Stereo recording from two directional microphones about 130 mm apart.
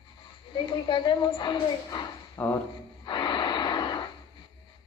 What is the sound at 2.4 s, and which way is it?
Speech, 15° left (ahead or behind).